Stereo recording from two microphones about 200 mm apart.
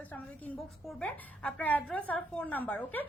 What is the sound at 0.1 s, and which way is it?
A woman's voice, 5° left (ahead or behind).